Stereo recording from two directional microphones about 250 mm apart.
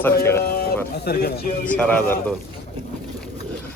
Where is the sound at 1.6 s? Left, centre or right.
Centre.